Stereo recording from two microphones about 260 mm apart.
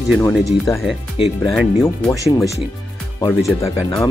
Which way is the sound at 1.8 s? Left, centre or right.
Centre.